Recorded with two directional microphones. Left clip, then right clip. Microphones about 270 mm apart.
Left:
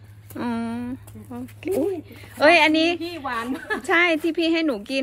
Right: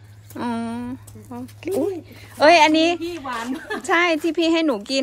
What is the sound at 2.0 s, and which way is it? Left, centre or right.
Speech, right.